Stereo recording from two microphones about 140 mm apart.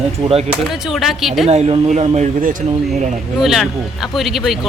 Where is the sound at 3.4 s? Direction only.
Centre (ahead or behind).